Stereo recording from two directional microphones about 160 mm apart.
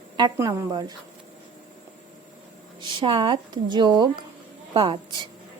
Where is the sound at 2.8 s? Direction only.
30° right (ahead or behind).